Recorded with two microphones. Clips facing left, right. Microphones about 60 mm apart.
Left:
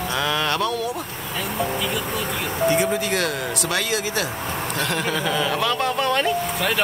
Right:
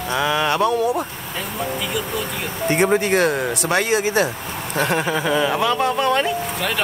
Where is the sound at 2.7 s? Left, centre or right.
Right; by 6.8 s centre.